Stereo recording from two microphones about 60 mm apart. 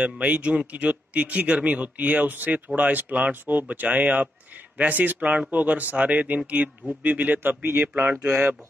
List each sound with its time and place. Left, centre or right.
0.0 s speech: right
7.9 s speech: right
8.3 s speech: right